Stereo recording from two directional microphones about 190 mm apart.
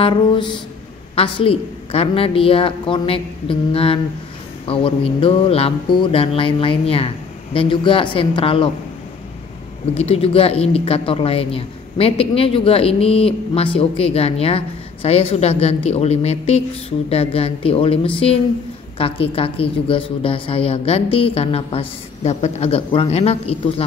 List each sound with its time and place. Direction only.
0.0 s a woman's voice: 25° left (ahead or behind)
9.9 s a woman's voice: 30° left (ahead or behind)